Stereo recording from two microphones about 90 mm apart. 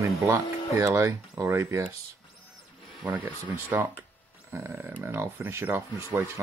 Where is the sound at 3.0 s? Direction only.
20° right (ahead or behind).